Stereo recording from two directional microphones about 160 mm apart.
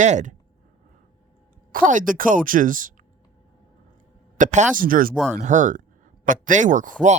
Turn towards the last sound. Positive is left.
turn(degrees=-50)  # may be behind; listen again after turning